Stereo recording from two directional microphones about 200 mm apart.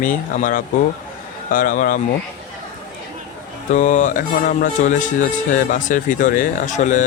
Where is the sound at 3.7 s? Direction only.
40° left (ahead or behind).